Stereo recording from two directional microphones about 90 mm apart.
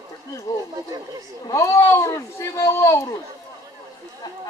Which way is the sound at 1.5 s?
35° left (ahead or behind).